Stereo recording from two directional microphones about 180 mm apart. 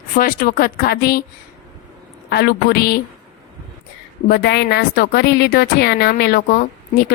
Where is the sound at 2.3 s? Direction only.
60° left (ahead or behind).